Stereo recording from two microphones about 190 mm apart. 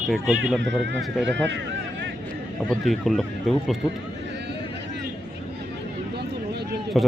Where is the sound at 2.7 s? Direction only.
Centre (ahead or behind).